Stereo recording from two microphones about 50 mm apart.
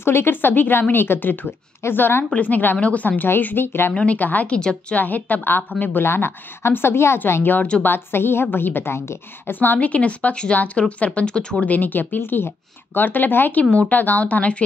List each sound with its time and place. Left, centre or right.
0.0 s a woman's voice: left
2.3 s speech: left
3.3 s a woman's voice: left
3.9 s a woman's voice: left
4.2 s speech: left
4.5 s a woman's voice: centre
4.9 s speech: left
6.0 s a woman's voice: left
9.5 s speech: left
9.8 s a woman's voice: left
11.6 s speech: left
13.7 s a woman's voice: left